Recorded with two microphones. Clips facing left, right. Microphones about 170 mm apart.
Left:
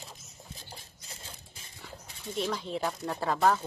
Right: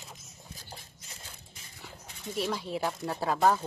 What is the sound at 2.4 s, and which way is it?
Speech, 5° right (ahead or behind).